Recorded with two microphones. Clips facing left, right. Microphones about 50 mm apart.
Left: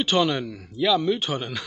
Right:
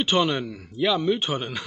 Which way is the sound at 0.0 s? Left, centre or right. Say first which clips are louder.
Even; centre.